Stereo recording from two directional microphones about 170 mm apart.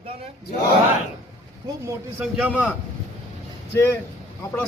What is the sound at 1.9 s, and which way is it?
Speech, 10° right (ahead or behind).